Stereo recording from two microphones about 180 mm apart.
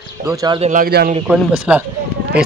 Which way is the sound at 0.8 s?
60° right (ahead or behind).